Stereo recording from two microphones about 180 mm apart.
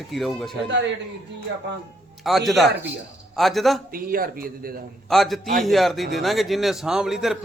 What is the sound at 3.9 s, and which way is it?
Speech, 55° right (ahead or behind).